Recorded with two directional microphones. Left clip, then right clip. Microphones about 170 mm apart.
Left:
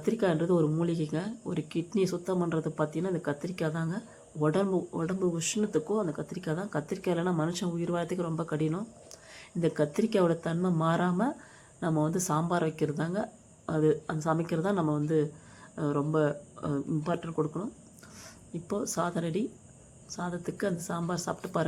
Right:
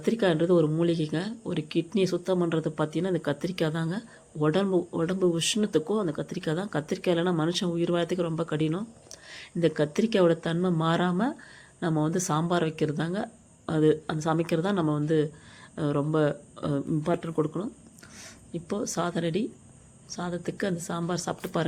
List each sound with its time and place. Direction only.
0.0 s speech: 10° right (ahead or behind)